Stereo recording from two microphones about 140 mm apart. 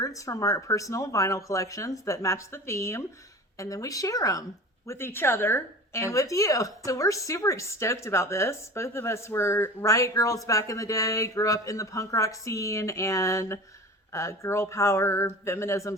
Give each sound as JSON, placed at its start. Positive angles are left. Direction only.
{"t": 0.0, "sound": "speech", "side_deg": 25}